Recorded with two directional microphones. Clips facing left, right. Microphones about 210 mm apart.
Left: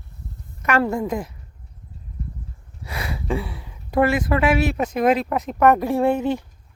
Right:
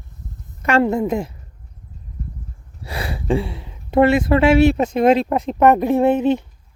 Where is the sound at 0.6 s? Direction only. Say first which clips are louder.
Right 4 dB; 25° right (ahead or behind).